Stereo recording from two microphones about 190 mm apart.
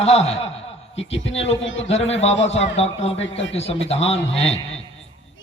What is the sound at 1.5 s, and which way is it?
Speech, 80° left.